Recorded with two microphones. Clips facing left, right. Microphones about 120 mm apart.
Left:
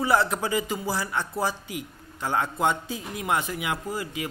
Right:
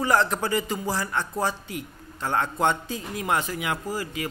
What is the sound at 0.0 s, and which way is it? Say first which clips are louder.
Speech: even; 10° left (ahead or behind).